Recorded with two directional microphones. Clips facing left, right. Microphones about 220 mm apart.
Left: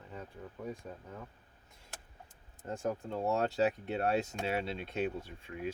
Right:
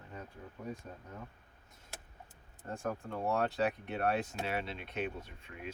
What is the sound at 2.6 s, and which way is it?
Speech, 20° left (ahead or behind).